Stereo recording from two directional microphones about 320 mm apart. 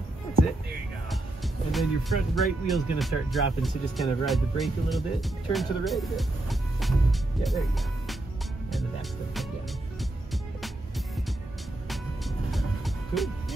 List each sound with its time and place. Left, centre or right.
1.1 s speech: centre
12.4 s music: centre